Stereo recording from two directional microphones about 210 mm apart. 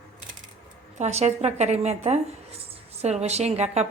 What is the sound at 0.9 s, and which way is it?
A woman's voice, 30° right (ahead or behind).